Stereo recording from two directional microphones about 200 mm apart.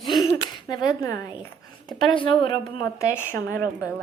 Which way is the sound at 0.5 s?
20° left (ahead or behind).